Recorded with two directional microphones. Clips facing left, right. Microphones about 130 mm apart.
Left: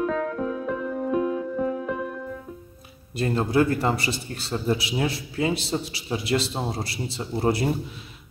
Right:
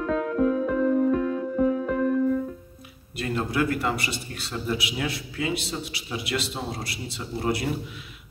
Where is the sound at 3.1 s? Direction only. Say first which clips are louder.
Left 5 dB; 30° left (ahead or behind).